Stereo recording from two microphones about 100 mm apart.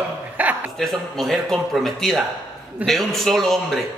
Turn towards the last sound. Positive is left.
turn(degrees=0)  # may be behind; listen again after turning